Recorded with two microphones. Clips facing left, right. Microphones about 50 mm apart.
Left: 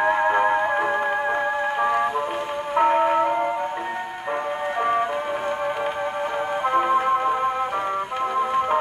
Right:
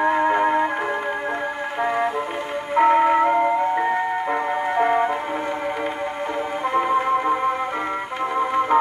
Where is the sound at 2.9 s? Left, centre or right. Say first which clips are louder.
Right 4 dB; right.